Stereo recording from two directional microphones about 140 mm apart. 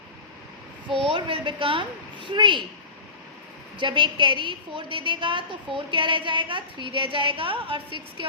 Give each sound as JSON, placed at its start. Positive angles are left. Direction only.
{"t": 1.0, "sound": "a woman's voice", "side_deg": -35}
{"t": 3.8, "sound": "a woman's voice", "side_deg": -35}